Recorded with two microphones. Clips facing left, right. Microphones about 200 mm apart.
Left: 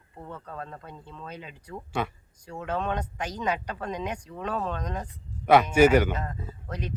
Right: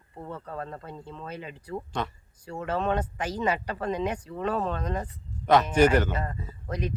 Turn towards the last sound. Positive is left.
turn(degrees=-10)  # may be behind; listen again after turning